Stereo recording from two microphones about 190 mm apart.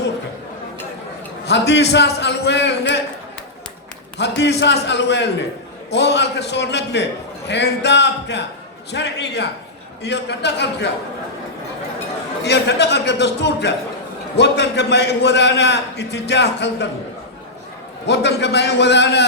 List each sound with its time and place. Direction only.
1.5 s a man's voice: 65° left (ahead or behind)
4.2 s a man's voice: 65° left (ahead or behind)
12.5 s a man's voice: 65° left (ahead or behind)
18.0 s a man's voice: 65° left (ahead or behind)